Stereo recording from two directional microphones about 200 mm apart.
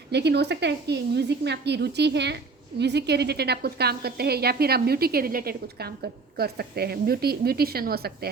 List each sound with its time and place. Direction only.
0.1 s a woman's voice: 55° right (ahead or behind)